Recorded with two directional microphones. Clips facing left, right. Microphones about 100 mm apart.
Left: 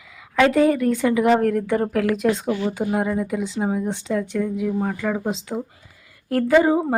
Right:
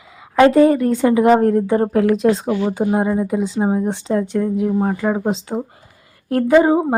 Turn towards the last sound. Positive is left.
turn(degrees=-25)  # may be behind; listen again after turning